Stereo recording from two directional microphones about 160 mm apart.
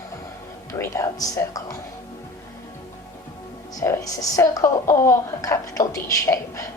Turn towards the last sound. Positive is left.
turn(degrees=20)  # may be behind; listen again after turning